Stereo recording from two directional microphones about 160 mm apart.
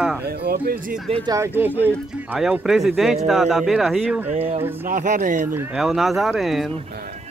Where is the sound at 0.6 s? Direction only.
60° right (ahead or behind).